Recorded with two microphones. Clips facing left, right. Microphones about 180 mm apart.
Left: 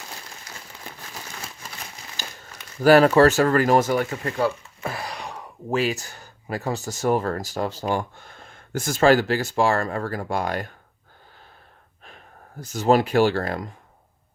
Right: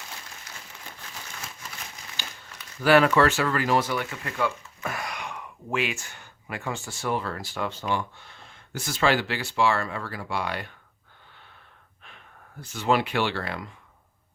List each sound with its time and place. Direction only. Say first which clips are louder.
2.1 s speech: left 3 dB; 40° left (ahead or behind)
12.0 s speech: left 4 dB; 40° left (ahead or behind)